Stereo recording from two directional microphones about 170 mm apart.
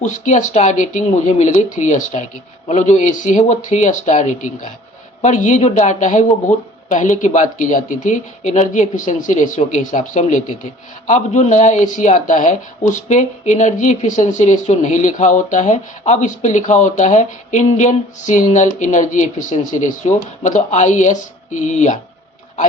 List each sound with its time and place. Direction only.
0.0 s speech: 45° left (ahead or behind)